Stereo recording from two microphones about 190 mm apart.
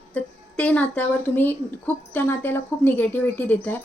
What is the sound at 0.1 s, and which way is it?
A woman's voice, 5° left (ahead or behind).